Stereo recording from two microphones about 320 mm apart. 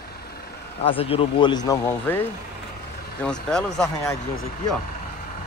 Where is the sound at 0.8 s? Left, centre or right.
Centre.